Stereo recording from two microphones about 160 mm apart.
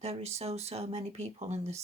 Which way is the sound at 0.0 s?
40° right (ahead or behind).